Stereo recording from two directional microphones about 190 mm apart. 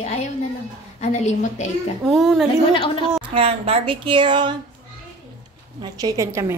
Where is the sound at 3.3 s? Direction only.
30° right (ahead or behind).